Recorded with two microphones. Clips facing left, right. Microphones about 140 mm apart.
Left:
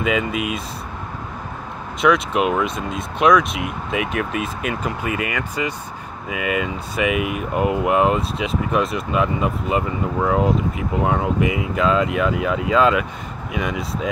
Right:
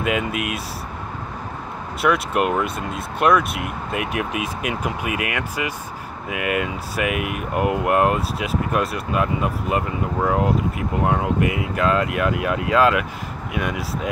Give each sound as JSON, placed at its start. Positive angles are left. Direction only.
{"t": 0.3, "sound": "speech", "side_deg": -65}
{"t": 2.0, "sound": "speech", "side_deg": -5}